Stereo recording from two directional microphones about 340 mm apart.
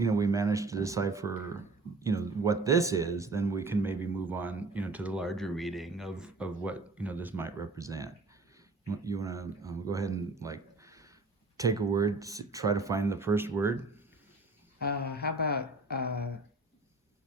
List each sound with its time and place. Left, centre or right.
0.0 s speech: centre
14.8 s speech: left